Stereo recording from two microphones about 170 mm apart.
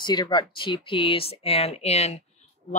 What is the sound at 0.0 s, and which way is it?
Speech, 25° left (ahead or behind).